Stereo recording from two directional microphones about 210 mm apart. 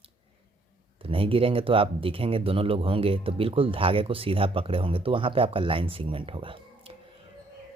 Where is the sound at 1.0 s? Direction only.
25° right (ahead or behind).